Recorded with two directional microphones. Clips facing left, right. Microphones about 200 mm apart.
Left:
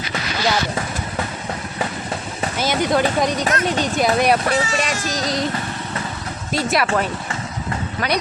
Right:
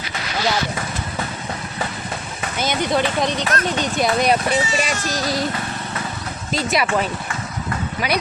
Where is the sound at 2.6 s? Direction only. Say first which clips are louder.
Left 2 dB; 5° left (ahead or behind).